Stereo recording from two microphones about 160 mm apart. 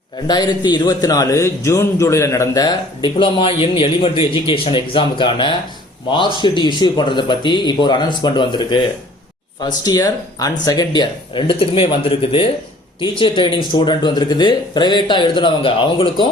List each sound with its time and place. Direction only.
0.3 s a man's voice: 25° left (ahead or behind)